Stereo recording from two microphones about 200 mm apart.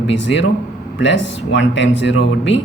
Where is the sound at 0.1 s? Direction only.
65° left (ahead or behind).